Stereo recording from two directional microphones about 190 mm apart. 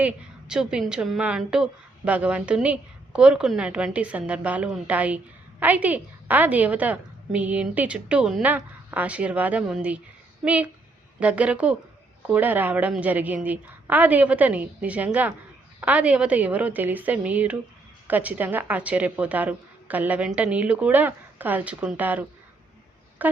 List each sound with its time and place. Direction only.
0.0 s a woman's voice: 5° right (ahead or behind)